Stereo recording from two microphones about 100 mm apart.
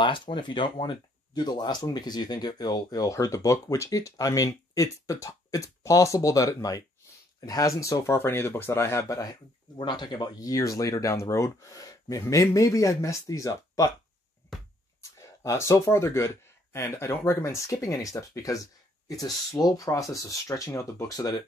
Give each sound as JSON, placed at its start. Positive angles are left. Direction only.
{"t": 0.0, "sound": "speech", "side_deg": 50}
{"t": 3.1, "sound": "speech", "side_deg": 30}
{"t": 15.0, "sound": "speech", "side_deg": 30}